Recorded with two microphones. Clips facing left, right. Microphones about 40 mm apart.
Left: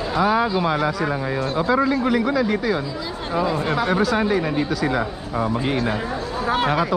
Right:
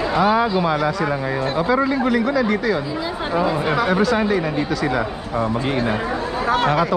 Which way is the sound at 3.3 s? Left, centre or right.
Centre.